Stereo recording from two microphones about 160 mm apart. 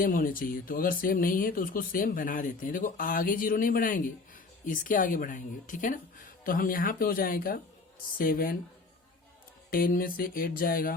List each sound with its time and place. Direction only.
0.0 s speech: 60° left (ahead or behind)
9.6 s speech: 65° left (ahead or behind)